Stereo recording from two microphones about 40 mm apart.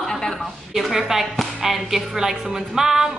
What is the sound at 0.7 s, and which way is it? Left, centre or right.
A woman's voice, centre.